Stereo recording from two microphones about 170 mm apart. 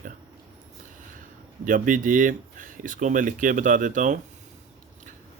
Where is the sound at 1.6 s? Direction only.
50° right (ahead or behind).